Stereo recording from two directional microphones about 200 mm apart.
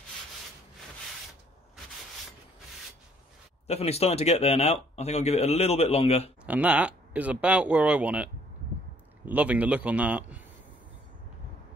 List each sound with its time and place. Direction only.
3.6 s speech: 30° left (ahead or behind)
6.4 s speech: 5° right (ahead or behind)